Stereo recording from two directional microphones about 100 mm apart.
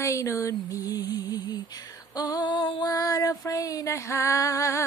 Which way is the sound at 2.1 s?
40° left (ahead or behind).